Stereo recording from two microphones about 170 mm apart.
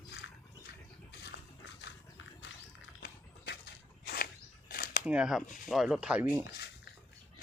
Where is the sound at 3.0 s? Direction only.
80° left.